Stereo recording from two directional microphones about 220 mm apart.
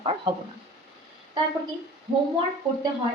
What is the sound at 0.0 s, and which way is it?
Speech, 25° right (ahead or behind).